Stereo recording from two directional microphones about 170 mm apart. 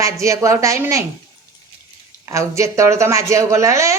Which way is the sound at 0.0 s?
20° right (ahead or behind).